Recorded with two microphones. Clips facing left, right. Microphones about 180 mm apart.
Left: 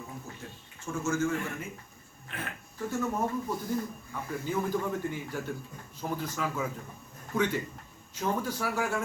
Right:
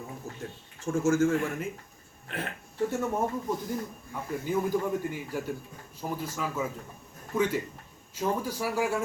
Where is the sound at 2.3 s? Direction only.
30° right (ahead or behind).